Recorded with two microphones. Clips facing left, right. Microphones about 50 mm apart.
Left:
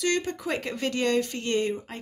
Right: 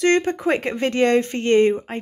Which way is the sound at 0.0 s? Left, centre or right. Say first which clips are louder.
Right 9 dB; right.